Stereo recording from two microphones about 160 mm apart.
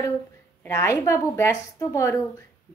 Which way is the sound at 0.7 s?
20° left (ahead or behind).